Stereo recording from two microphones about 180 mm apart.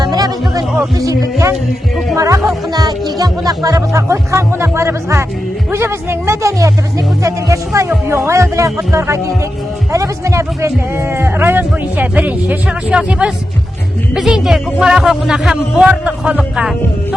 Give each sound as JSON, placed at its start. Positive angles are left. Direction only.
{"t": 0.0, "sound": "music", "side_deg": -20}
{"t": 0.9, "sound": "a man's voice", "side_deg": -20}
{"t": 2.1, "sound": "music", "side_deg": -20}
{"t": 2.7, "sound": "speech", "side_deg": -20}